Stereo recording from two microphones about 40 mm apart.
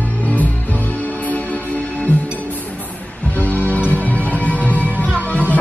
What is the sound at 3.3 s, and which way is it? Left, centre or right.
Music, left.